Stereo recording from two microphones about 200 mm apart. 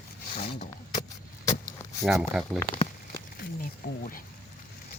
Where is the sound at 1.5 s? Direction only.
20° left (ahead or behind).